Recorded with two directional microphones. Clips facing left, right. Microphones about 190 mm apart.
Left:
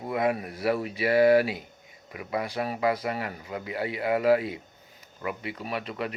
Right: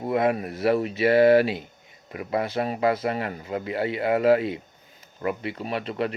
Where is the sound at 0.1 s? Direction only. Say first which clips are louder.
Right 4 dB; 25° right (ahead or behind).